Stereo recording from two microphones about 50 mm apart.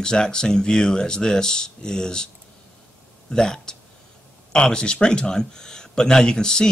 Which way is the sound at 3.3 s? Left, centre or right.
Centre.